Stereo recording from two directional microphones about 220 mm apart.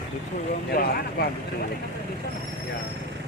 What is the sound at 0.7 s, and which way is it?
Speech, 45° left (ahead or behind).